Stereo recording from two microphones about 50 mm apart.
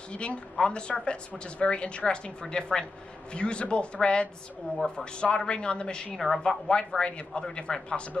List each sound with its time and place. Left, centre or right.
0.1 s a woman's voice: left
6.1 s speech: centre
6.7 s speech: centre